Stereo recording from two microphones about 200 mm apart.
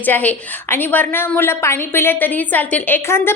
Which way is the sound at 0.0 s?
10° left (ahead or behind).